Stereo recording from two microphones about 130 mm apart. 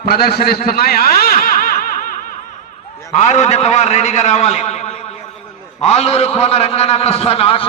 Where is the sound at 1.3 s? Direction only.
90° left.